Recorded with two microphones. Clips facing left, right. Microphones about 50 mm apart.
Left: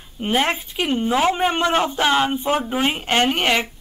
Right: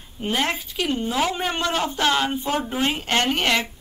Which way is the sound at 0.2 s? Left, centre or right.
Left.